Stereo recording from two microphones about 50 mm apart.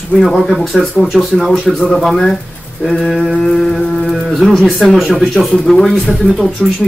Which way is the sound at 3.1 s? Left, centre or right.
Centre.